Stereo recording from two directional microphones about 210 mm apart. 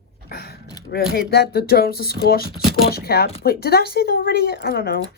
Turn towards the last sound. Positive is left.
turn(degrees=45)  # may be behind; listen again after turning